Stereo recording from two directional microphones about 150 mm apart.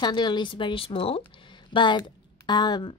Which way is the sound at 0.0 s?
30° left (ahead or behind).